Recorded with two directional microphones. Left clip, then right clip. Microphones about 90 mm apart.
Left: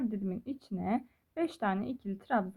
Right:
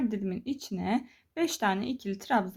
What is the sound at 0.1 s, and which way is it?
A woman's voice, 35° left (ahead or behind).